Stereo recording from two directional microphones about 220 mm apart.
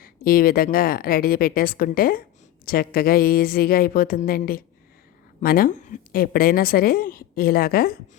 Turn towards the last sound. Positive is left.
turn(degrees=45)  # may be behind; listen again after turning